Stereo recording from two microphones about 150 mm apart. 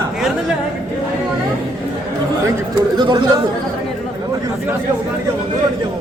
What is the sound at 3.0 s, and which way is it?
Speech, 30° right (ahead or behind).